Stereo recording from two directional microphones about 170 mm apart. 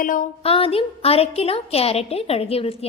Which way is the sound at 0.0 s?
55° left (ahead or behind).